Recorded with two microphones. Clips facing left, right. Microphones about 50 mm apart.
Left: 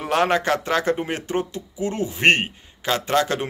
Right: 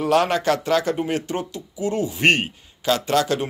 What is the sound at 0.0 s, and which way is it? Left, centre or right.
A man's voice, left.